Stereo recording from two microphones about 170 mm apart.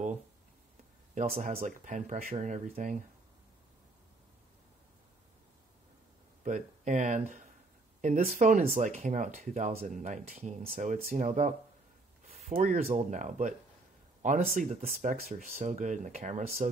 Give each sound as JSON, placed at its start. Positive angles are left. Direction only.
{"t": 1.1, "sound": "speech", "side_deg": -45}
{"t": 6.4, "sound": "speech", "side_deg": -45}